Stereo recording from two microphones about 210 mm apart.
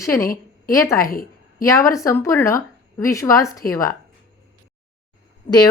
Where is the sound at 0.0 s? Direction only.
15° left (ahead or behind).